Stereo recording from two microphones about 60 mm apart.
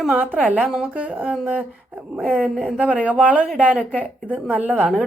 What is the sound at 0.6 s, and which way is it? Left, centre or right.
Speech, centre.